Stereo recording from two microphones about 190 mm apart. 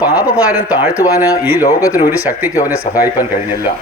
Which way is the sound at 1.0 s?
20° left (ahead or behind).